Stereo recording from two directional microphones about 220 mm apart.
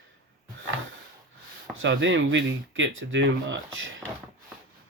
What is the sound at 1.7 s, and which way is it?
Speech, 55° right (ahead or behind).